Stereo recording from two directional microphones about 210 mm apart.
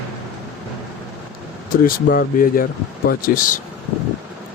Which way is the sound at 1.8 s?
45° left (ahead or behind).